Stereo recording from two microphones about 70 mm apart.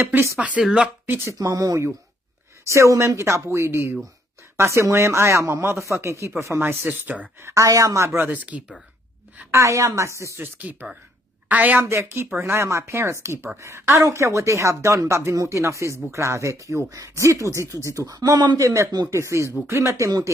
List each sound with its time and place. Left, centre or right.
0.0 s speech: right
0.4 s speech: centre
1.0 s speech: right
1.4 s speech: right
7.0 s speech: right
7.4 s speech: right
8.2 s speech: right
9.5 s speech: right
10.4 s a woman's voice: right
11.8 s speech: right
18.6 s speech: right